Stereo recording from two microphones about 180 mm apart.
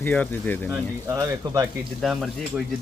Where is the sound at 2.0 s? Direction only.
Centre (ahead or behind).